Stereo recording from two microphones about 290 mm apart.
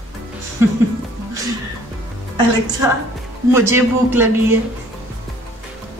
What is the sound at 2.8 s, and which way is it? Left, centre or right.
A man's voice, centre.